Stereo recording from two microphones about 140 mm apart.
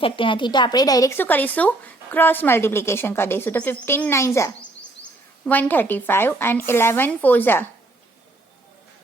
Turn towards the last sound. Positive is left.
turn(degrees=15)  # may be behind; listen again after turning